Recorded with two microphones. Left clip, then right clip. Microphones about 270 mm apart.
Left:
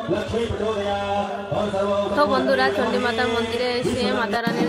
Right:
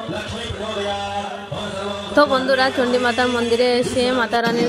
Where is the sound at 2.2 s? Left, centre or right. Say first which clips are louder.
Right 6 dB; right.